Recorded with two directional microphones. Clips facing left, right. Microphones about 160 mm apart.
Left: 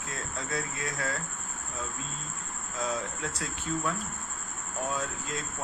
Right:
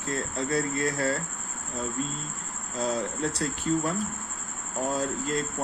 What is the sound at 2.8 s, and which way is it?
Speech, 35° right (ahead or behind).